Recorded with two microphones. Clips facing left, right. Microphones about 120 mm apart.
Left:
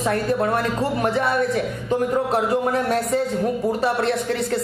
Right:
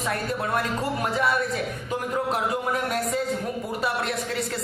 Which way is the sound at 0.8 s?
30° left (ahead or behind).